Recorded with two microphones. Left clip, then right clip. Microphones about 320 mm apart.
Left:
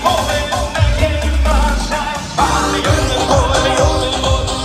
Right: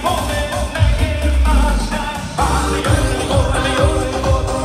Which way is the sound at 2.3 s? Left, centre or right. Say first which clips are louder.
Left 4 dB; left.